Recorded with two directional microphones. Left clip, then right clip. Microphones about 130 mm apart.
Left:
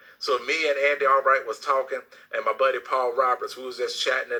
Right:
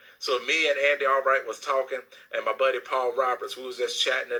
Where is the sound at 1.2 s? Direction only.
40° left (ahead or behind).